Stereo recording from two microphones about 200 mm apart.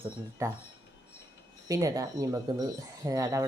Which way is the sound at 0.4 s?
15° right (ahead or behind).